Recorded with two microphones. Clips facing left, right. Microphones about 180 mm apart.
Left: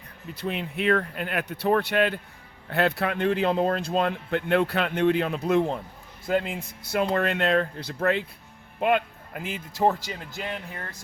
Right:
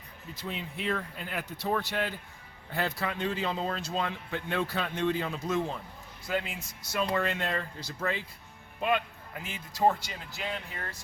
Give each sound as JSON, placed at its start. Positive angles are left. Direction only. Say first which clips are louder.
{"t": 0.3, "sound": "a man's voice", "louder": "left 8 dB", "side_deg": 65}